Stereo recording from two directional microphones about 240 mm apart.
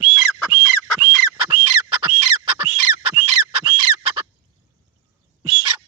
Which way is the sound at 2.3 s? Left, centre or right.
Right.